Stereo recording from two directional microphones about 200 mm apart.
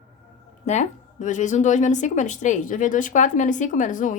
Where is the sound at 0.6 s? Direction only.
35° left (ahead or behind).